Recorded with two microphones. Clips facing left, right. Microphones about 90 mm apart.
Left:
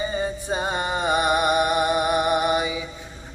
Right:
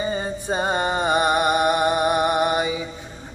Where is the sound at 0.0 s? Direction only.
35° right (ahead or behind).